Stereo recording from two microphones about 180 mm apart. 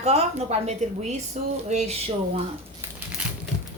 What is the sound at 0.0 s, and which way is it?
A woman's voice, 35° right (ahead or behind).